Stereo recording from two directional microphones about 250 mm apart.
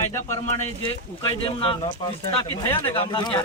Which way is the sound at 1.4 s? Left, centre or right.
Left.